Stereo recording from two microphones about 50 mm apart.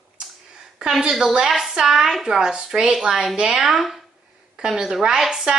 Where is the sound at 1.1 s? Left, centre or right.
Centre.